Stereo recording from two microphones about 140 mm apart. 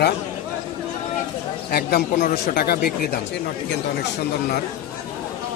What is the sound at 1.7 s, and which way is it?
Speech, 90° left.